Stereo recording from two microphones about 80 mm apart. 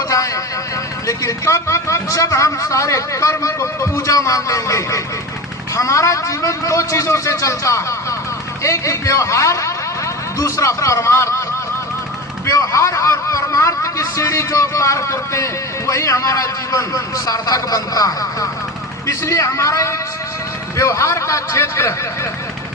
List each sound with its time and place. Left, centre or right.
1.0 s a man's voice: left
12.5 s a man's voice: left